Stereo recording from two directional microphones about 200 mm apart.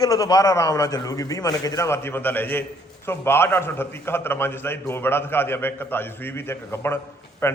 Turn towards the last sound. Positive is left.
turn(degrees=15)  # may be behind; listen again after turning